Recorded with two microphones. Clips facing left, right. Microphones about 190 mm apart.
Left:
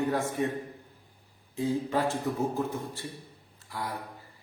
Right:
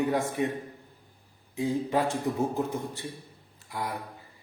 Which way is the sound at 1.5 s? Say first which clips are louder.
Right 1 dB; 15° right (ahead or behind).